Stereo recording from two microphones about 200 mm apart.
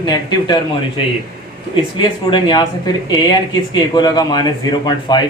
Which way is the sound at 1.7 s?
25° left (ahead or behind).